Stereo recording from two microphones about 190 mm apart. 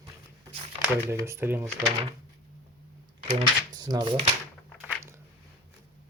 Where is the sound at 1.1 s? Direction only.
15° right (ahead or behind).